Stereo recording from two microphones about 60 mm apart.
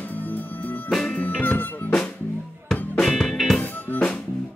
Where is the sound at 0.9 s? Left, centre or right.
Centre.